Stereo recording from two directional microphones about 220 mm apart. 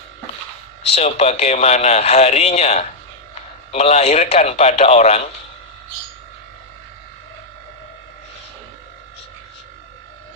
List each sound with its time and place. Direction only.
0.9 s speech: 25° left (ahead or behind)